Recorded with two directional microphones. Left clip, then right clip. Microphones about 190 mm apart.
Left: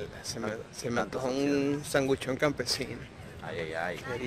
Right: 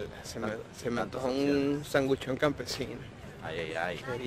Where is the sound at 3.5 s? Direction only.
50° left (ahead or behind).